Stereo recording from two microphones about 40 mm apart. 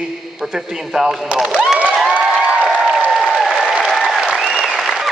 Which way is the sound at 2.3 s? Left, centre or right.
Right.